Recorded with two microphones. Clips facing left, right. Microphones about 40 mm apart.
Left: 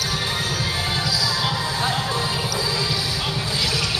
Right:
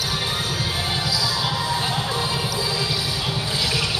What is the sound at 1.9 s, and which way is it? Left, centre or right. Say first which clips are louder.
Music: left 1 dB; centre.